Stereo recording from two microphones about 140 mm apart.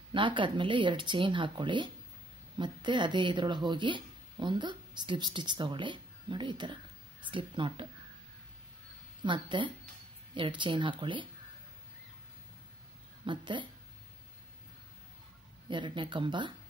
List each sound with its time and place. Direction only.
0.1 s speech: 35° right (ahead or behind)
9.2 s speech: 35° right (ahead or behind)
13.2 s speech: 35° right (ahead or behind)
15.7 s speech: 35° right (ahead or behind)